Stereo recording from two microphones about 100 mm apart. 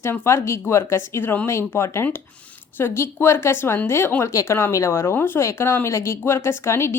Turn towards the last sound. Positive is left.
turn(degrees=25)  # may be behind; listen again after turning